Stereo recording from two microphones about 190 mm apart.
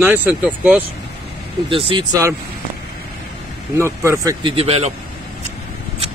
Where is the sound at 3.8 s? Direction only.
15° right (ahead or behind).